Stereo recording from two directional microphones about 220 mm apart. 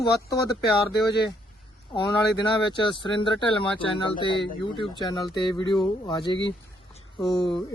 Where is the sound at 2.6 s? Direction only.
20° left (ahead or behind).